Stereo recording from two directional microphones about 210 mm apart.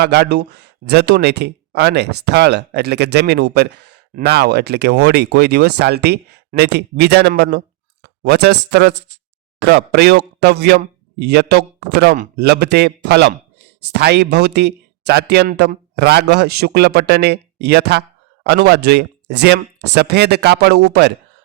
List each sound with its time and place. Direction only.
0.0 s speech: 50° right (ahead or behind)